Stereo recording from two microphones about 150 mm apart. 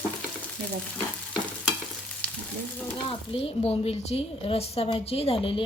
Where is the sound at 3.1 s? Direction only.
40° left (ahead or behind).